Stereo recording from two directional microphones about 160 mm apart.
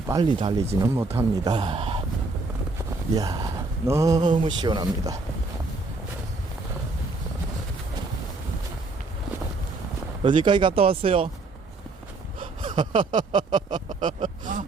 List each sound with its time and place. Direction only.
0.1 s speech: 30° right (ahead or behind)
0.8 s speech: 15° right (ahead or behind)
1.5 s speech: 35° right (ahead or behind)
3.2 s speech: 20° right (ahead or behind)
10.2 s speech: 30° right (ahead or behind)
12.4 s speech: 30° right (ahead or behind)
14.1 s a sound: 55° right (ahead or behind)